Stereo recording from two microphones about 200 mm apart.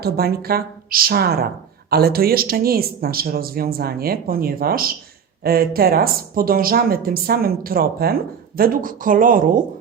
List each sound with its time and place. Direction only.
0.0 s a woman's voice: 50° right (ahead or behind)